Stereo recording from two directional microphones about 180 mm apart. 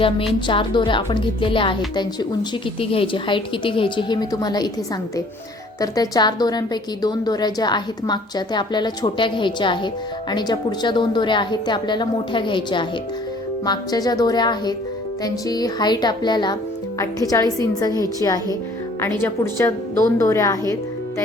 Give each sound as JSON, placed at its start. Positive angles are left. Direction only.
{"t": 0.3, "sound": "a woman's voice", "side_deg": 25}
{"t": 2.9, "sound": "a woman's voice", "side_deg": 30}
{"t": 5.8, "sound": "a woman's voice", "side_deg": 20}